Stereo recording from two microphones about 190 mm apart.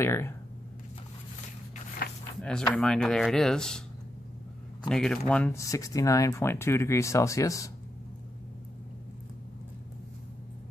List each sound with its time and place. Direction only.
0.0 s speech: 15° left (ahead or behind)
2.0 s a sound: 55° left (ahead or behind)
2.7 s speech: 5° left (ahead or behind)
4.8 s speech: 5° left (ahead or behind)